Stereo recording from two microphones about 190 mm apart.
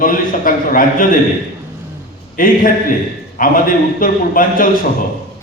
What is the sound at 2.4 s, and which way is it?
A man's voice, 45° left (ahead or behind).